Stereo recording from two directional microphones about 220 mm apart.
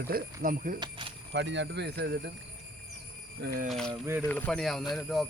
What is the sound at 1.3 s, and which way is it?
Speech, 55° right (ahead or behind).